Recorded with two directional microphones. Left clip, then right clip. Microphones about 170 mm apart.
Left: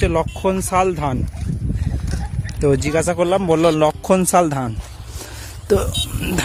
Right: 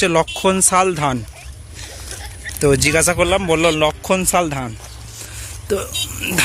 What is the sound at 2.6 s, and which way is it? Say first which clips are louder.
Speech: right 3 dB; 20° left (ahead or behind).